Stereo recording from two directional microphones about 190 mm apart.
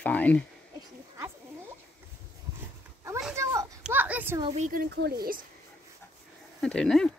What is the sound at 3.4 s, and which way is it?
Children playing, 15° right (ahead or behind).